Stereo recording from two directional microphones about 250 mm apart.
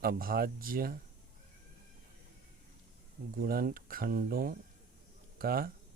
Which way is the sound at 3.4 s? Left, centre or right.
Right.